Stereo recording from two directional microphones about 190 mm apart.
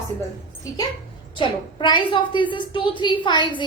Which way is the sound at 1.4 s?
25° left (ahead or behind).